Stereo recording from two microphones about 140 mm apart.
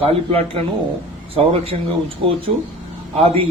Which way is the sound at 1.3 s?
45° right (ahead or behind).